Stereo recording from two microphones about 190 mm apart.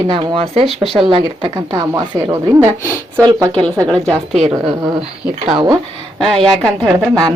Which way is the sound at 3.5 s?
5° left (ahead or behind).